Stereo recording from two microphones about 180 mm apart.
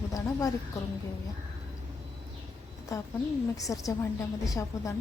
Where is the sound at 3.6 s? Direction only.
20° left (ahead or behind).